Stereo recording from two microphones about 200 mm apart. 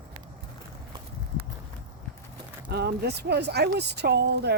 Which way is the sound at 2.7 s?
55° right (ahead or behind).